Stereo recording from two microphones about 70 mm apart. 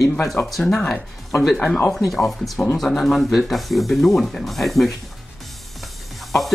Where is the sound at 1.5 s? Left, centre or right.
Centre.